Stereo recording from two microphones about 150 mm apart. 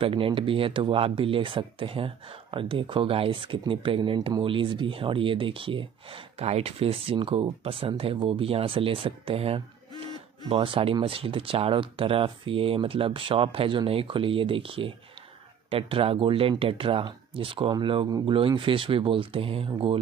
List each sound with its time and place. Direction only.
0.0 s speech: 35° right (ahead or behind)